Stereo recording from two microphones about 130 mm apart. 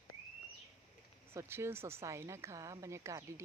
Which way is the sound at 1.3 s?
20° right (ahead or behind).